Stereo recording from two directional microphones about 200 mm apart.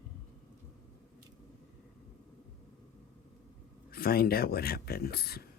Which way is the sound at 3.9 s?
50° left (ahead or behind).